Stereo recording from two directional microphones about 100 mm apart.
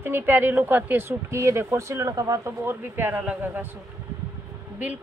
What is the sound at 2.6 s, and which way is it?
Speech, 20° right (ahead or behind).